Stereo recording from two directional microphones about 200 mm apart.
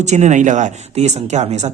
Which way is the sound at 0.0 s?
35° right (ahead or behind).